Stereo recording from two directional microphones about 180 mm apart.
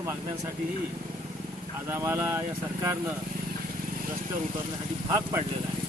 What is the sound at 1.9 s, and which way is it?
Speech, 15° right (ahead or behind).